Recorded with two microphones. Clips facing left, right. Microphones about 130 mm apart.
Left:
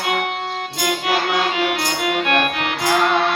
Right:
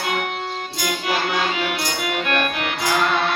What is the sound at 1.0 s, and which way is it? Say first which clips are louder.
Music: left 2 dB; 90° left.